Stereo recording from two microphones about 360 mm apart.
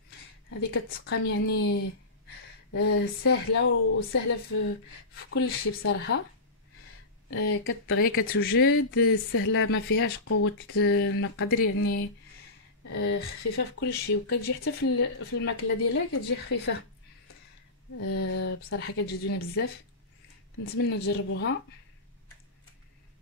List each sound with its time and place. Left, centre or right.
0.5 s speech: left
2.7 s speech: left
7.2 s speech: left
11.6 s speech: left
12.9 s speech: left
17.9 s speech: left
20.6 s speech: left